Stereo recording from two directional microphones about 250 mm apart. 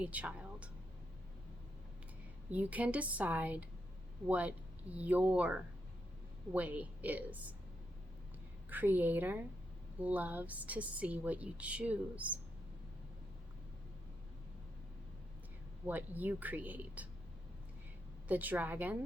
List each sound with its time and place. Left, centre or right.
0.0 s speech: centre
2.5 s a woman's voice: centre
8.7 s a woman's voice: centre
15.9 s speech: centre
18.3 s speech: centre